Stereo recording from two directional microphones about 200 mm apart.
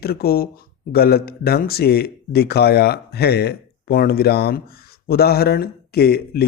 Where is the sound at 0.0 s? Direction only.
50° left (ahead or behind).